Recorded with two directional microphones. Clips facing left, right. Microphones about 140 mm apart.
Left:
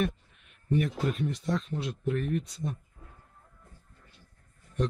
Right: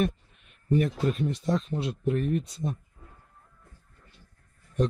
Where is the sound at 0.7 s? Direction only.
35° right (ahead or behind).